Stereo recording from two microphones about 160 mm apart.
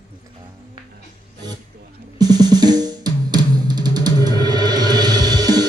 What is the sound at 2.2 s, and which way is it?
Drum, 25° right (ahead or behind).